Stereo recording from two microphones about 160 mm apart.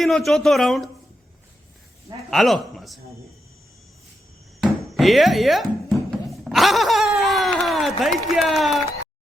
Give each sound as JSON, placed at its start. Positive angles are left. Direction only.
{"t": 0.0, "sound": "speech", "side_deg": 0}
{"t": 2.3, "sound": "speech", "side_deg": 0}
{"t": 4.6, "sound": "music", "side_deg": 0}